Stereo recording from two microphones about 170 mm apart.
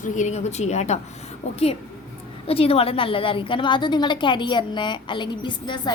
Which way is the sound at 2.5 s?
35° left (ahead or behind).